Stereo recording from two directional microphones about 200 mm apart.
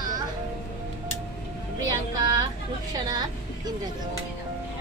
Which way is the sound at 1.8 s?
20° right (ahead or behind).